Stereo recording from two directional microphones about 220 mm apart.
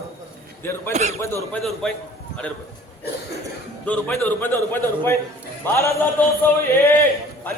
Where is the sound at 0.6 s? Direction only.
10° left (ahead or behind).